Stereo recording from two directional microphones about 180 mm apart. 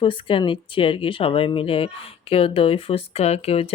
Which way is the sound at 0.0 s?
30° left (ahead or behind).